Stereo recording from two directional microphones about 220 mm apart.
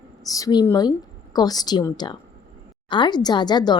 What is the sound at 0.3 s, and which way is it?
A woman's voice, 15° left (ahead or behind).